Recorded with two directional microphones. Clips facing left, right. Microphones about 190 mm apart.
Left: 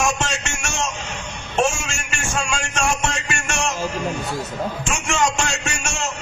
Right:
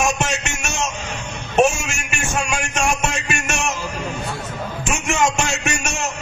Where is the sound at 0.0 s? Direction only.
20° right (ahead or behind).